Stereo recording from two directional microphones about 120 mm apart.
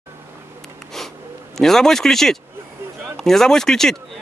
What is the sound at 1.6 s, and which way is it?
Speech, 5° left (ahead or behind).